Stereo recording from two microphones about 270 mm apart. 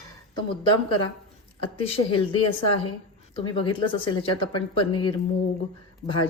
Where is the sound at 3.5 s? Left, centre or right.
Centre.